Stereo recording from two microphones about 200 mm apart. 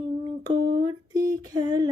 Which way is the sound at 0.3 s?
20° right (ahead or behind).